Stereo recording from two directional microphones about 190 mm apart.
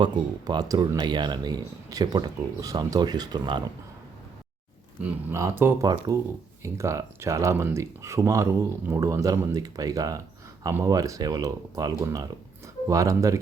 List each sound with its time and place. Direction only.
0.0 s speech: 20° right (ahead or behind)
4.9 s speech: 10° right (ahead or behind)